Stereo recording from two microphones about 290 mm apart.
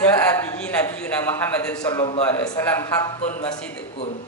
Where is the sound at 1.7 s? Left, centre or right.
Centre.